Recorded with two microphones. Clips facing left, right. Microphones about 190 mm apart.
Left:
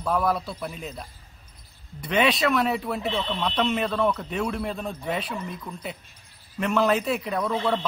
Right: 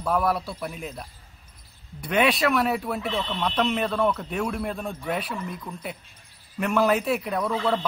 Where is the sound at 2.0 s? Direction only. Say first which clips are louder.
Even; 5° right (ahead or behind).